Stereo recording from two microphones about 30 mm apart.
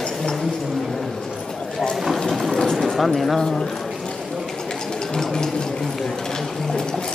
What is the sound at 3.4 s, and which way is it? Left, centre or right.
Speech, centre.